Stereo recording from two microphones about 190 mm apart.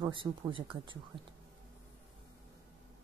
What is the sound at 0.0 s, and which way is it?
Speech, 25° right (ahead or behind).